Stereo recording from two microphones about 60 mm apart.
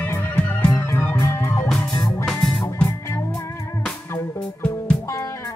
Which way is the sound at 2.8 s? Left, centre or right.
Left.